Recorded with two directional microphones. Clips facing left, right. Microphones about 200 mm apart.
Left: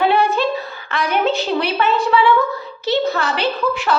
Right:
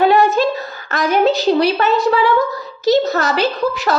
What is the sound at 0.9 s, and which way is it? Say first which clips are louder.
A woman's voice: right 4 dB; 40° right (ahead or behind).